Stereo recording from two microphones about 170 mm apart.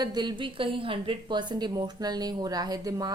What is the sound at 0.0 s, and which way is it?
A woman's voice, 25° right (ahead or behind).